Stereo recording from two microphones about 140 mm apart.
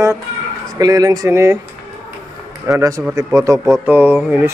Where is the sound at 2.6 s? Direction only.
25° right (ahead or behind).